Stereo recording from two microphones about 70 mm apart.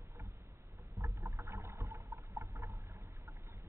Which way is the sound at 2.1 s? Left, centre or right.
Right.